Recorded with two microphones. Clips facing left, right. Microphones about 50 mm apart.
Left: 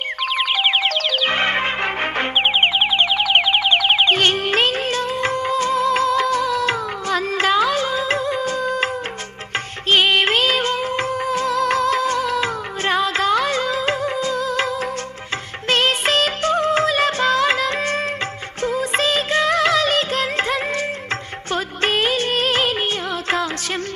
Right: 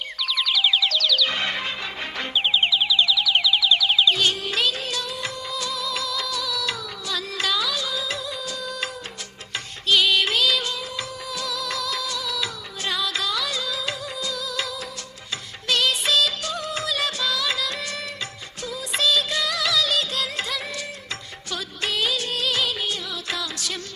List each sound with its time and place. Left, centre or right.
0.2 s music: left
9.9 s music: left
15.7 s music: left
18.6 s music of bollywood: left
21.5 s music: left